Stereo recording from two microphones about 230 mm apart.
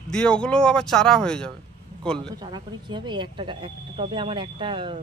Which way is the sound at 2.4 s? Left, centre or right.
Centre.